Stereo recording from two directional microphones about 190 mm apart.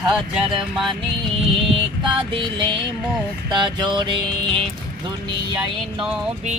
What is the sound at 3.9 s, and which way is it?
Music, 25° right (ahead or behind).